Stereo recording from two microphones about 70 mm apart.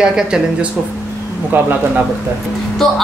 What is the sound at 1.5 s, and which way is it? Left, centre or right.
Speech, right.